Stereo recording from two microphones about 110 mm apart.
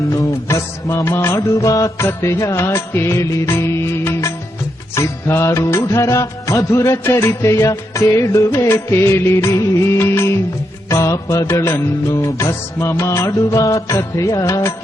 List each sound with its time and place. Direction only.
0.1 s music: 30° left (ahead or behind)